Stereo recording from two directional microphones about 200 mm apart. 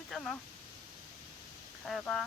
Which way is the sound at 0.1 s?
Centre (ahead or behind).